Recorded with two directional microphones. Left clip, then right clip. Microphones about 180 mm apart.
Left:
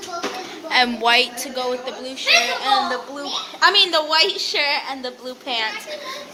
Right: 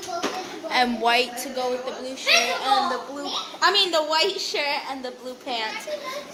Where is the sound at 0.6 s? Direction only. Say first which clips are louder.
Left 4 dB; 15° right (ahead or behind).